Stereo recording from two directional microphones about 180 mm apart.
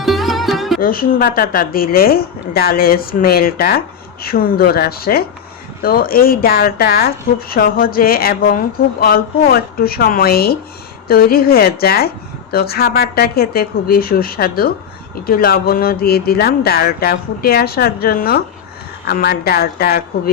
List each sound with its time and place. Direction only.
0.0 s music: centre (ahead or behind)
0.8 s a woman's voice: 50° left (ahead or behind)